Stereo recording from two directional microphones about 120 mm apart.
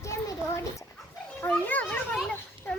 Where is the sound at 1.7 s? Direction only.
15° left (ahead or behind).